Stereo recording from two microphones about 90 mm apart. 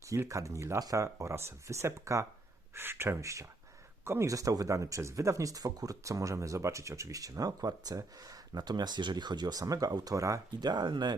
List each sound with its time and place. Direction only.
0.1 s speech: 35° right (ahead or behind)
10.6 s speech: 50° right (ahead or behind)